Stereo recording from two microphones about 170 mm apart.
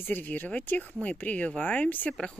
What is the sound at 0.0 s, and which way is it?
Speech, 10° left (ahead or behind).